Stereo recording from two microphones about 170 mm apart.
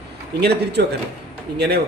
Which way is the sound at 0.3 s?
75° right (ahead or behind).